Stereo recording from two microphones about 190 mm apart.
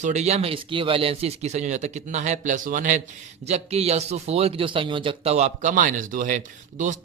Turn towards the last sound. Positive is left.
turn(degrees=-40)  # may be behind; listen again after turning